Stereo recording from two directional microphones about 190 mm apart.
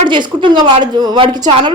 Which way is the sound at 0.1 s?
25° right (ahead or behind).